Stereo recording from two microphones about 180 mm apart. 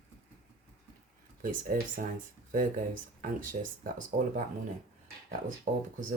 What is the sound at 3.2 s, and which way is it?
Speech, 50° right (ahead or behind).